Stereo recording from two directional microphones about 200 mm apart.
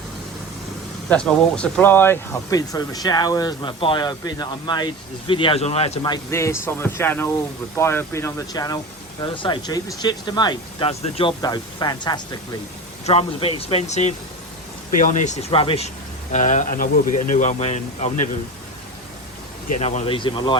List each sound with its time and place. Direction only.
1.1 s speech: 5° left (ahead or behind); by 18.1 s 35° left (ahead or behind)
19.8 s speech: 35° left (ahead or behind)